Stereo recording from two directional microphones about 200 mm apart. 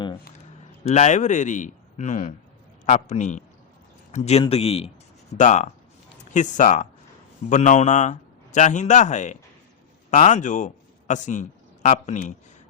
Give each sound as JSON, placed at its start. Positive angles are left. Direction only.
{"t": 0.9, "sound": "a man's voice", "side_deg": 35}